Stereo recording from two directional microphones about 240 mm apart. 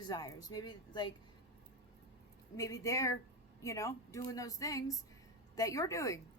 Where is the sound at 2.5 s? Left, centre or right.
Centre.